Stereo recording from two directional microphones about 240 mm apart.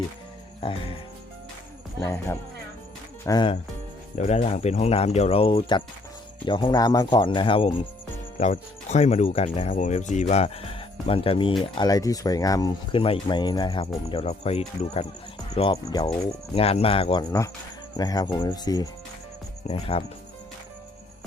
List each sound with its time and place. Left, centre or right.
0.6 s speech: left
2.0 s speech: centre